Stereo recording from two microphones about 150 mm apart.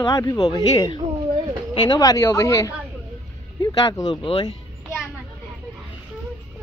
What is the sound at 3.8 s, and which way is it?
Speech, 30° left (ahead or behind).